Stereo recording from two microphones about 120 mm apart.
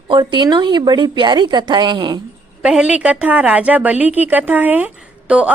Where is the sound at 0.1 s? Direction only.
40° right (ahead or behind).